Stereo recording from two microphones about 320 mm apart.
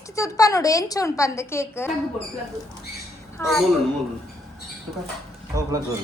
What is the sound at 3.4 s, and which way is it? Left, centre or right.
Speech, centre.